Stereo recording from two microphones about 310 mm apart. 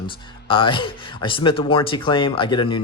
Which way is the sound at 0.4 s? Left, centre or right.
Centre.